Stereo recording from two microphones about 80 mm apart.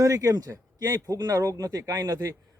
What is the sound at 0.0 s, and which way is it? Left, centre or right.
A man's voice, right.